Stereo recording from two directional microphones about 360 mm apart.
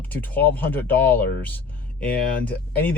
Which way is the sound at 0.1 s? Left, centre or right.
Centre.